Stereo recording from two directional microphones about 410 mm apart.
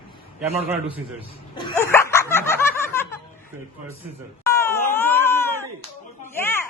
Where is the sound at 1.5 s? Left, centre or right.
Centre.